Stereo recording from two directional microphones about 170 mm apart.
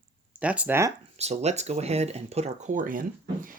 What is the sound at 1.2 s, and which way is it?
Speech, 40° right (ahead or behind).